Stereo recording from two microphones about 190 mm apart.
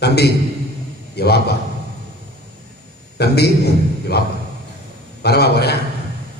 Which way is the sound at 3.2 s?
60° left (ahead or behind).